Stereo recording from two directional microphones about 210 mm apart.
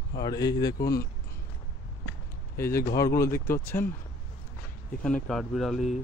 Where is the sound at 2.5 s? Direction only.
10° left (ahead or behind).